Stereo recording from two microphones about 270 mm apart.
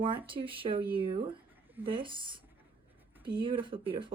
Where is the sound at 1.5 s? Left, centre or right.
Centre.